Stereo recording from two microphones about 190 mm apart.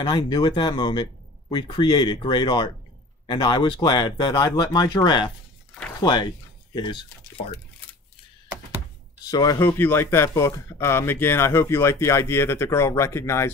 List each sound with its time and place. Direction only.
0.0 s speech: 20° left (ahead or behind)
9.2 s speech: 20° left (ahead or behind)